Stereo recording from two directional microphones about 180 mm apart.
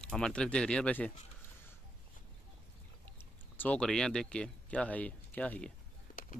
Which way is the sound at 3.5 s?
5° left (ahead or behind).